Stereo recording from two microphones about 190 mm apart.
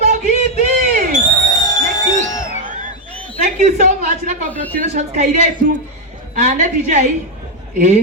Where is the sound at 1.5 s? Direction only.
20° left (ahead or behind).